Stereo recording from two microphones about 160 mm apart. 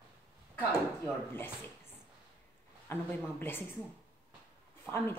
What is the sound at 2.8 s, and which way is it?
Speech, 15° left (ahead or behind).